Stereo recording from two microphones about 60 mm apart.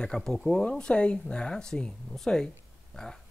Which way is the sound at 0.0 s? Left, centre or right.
Centre.